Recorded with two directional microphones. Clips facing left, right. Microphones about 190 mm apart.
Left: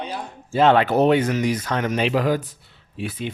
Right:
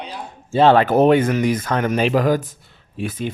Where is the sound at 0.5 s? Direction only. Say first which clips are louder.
Right 3 dB; 40° right (ahead or behind).